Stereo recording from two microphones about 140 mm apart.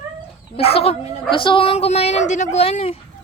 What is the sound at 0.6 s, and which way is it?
Speech, 45° left (ahead or behind).